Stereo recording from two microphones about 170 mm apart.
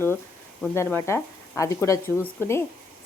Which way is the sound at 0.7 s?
15° left (ahead or behind).